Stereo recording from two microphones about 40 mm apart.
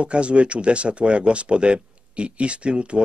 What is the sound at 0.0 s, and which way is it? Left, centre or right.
Speech, right.